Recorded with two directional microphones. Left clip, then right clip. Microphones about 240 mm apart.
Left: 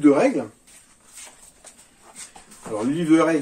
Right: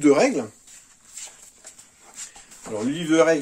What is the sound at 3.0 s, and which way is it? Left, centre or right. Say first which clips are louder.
Speech: even; right.